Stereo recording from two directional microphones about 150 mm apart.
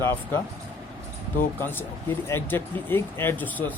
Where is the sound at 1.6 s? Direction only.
15° left (ahead or behind).